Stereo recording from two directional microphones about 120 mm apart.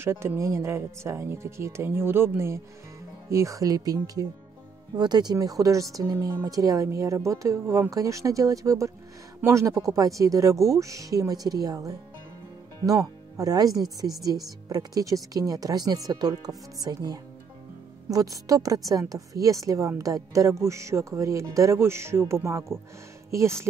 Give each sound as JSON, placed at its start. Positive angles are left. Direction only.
{"t": 0.0, "sound": "a woman's voice", "side_deg": -20}